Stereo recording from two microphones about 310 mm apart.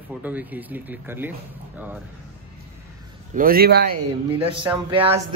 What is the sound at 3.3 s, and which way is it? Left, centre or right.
Speech, right.